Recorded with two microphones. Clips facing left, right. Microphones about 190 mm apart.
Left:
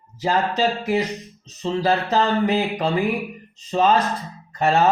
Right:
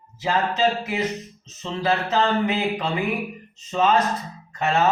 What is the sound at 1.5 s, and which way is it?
Speech, 35° left (ahead or behind).